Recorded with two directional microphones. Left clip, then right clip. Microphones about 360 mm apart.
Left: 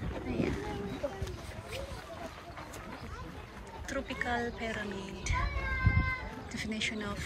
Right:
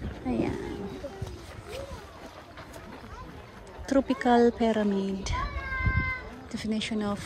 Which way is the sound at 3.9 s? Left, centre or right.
Centre.